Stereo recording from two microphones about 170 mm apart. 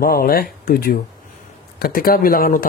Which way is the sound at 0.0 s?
60° left (ahead or behind).